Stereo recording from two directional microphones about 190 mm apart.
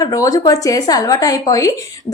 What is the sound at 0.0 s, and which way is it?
A woman's voice, 20° left (ahead or behind).